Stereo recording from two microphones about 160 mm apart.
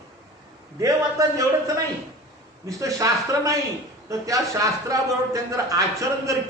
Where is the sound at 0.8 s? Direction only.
20° right (ahead or behind).